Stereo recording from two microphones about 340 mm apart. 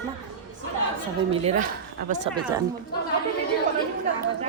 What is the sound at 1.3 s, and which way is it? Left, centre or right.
Speech, centre.